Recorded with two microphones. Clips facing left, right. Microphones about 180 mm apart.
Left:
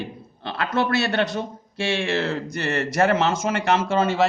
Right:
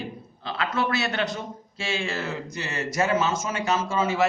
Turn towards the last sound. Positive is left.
turn(degrees=70)  # may be behind; listen again after turning